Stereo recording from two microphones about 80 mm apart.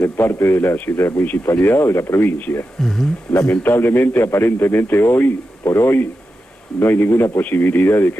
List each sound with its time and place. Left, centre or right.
0.0 s a man's voice: left
2.8 s speech: centre
3.4 s a man's voice: left